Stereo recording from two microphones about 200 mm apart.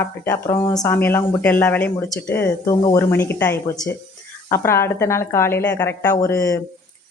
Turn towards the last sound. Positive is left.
turn(degrees=15)  # may be behind; listen again after turning